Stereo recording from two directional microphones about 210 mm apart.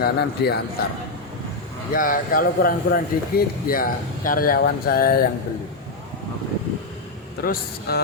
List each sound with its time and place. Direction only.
0.0 s speech: 50° left (ahead or behind)
1.9 s speech: 40° left (ahead or behind)
7.4 s speech: 45° left (ahead or behind)